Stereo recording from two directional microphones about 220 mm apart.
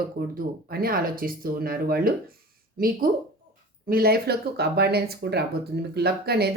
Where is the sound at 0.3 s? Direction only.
40° right (ahead or behind).